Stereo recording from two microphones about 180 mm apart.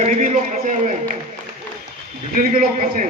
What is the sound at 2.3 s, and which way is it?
Speech, 50° right (ahead or behind).